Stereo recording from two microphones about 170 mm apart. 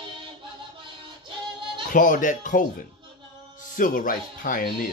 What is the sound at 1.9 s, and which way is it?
Speech, 50° left (ahead or behind).